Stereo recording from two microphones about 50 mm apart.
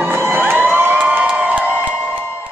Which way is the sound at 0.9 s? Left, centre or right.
Right.